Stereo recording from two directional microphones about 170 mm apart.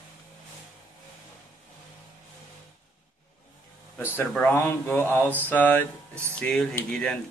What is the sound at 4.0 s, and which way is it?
Speech, 15° left (ahead or behind).